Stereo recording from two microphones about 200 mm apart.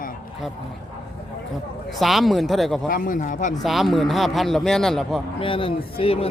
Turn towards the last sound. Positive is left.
turn(degrees=30)  # may be behind; listen again after turning